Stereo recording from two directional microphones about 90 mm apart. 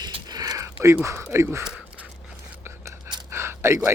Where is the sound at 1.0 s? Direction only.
30° right (ahead or behind).